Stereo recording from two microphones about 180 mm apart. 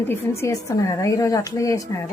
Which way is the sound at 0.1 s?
15° left (ahead or behind).